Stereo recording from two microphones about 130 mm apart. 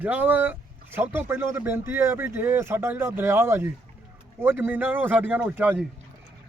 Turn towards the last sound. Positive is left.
turn(degrees=-10)  # may be behind; listen again after turning